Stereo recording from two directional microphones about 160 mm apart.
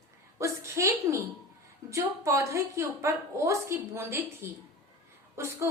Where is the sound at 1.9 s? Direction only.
20° right (ahead or behind).